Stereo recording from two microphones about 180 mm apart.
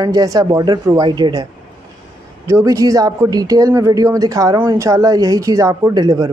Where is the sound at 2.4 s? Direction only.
15° right (ahead or behind).